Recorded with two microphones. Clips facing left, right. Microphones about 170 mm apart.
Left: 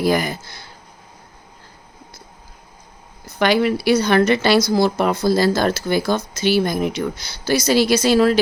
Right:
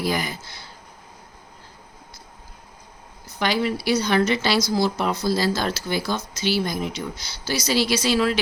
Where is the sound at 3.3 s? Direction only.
65° left (ahead or behind); by 8.4 s 45° left (ahead or behind).